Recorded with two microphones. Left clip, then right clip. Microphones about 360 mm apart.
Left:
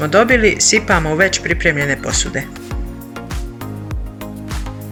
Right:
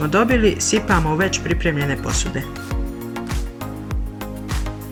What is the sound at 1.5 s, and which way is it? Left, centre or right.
Speech, left.